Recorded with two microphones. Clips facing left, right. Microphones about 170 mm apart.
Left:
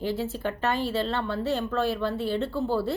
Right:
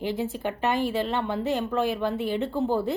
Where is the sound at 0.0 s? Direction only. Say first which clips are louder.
Even; 15° right (ahead or behind).